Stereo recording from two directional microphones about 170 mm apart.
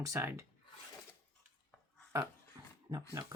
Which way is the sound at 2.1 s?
15° right (ahead or behind).